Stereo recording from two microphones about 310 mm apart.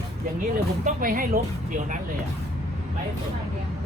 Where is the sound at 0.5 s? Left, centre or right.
Right.